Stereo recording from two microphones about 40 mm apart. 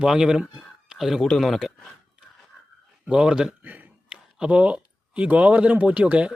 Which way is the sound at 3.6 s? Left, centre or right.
Right.